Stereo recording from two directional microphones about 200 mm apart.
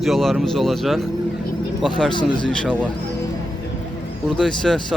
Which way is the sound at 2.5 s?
5° left (ahead or behind).